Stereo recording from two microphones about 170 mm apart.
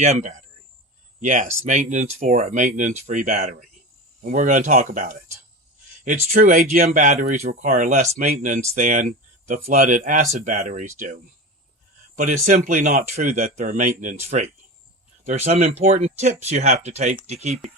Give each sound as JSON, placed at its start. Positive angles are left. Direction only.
{"t": 0.0, "sound": "speech", "side_deg": -45}